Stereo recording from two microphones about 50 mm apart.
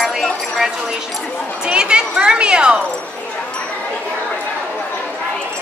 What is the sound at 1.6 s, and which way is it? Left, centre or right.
Speech, centre.